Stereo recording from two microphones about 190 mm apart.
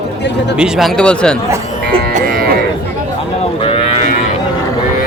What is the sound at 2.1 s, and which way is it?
Livestock, 50° right (ahead or behind).